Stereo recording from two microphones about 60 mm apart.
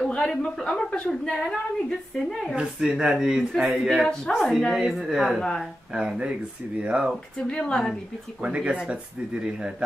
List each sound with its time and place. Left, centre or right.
0.0 s a woman's voice: centre
2.6 s speech: centre
4.0 s speech: centre
4.7 s speech: centre
7.4 s a woman's voice: centre
8.4 s speech: centre